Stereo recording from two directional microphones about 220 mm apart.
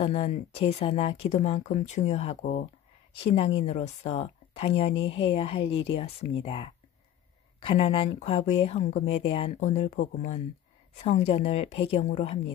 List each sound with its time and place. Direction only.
0.0 s speech: 25° left (ahead or behind)